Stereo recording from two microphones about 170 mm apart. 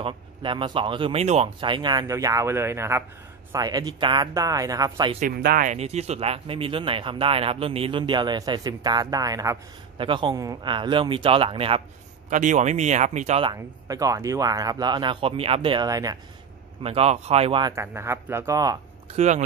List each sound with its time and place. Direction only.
0.0 s speech: 30° right (ahead or behind)
5.4 s speech: 60° right (ahead or behind)
5.7 s speech: 40° right (ahead or behind)
12.3 s speech: 45° right (ahead or behind)
13.4 s speech: 25° right (ahead or behind)
16.8 s speech: 35° right (ahead or behind)
17.7 s speech: 15° right (ahead or behind)
19.1 s speech: 45° right (ahead or behind)